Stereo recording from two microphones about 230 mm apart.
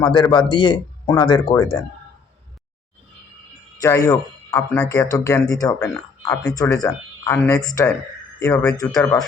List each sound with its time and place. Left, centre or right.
0.0 s speech: centre
3.8 s speech: centre